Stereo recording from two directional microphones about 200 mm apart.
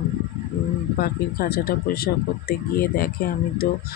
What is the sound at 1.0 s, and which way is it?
Speech, 50° left (ahead or behind).